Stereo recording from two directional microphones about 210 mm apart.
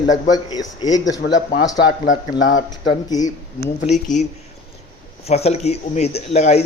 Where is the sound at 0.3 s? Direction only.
20° left (ahead or behind).